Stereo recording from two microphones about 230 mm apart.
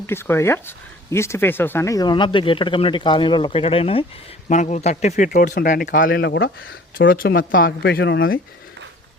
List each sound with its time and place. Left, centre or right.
0.1 s speech: centre; by 8.4 s left